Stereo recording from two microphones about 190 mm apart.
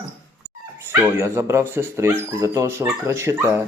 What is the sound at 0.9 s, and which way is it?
Speech, 10° right (ahead or behind).